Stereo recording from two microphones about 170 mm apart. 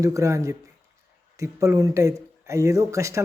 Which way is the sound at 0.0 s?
20° right (ahead or behind).